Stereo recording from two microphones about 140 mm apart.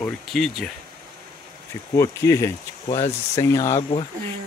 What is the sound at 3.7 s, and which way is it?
Speech, 45° left (ahead or behind).